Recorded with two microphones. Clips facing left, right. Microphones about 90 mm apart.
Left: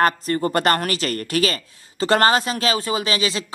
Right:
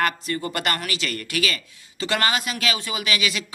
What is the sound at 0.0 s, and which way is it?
A woman's voice, 40° left (ahead or behind).